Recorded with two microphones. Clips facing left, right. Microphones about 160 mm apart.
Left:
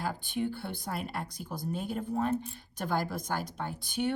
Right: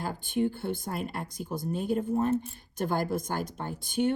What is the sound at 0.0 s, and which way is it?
A woman's voice, 50° right (ahead or behind).